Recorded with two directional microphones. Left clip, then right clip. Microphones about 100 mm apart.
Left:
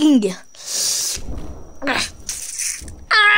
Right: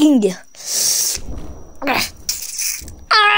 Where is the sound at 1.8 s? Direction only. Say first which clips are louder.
Right 3 dB; 20° right (ahead or behind).